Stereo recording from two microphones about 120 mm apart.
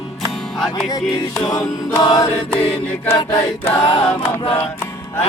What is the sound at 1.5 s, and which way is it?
Chant, 35° left (ahead or behind).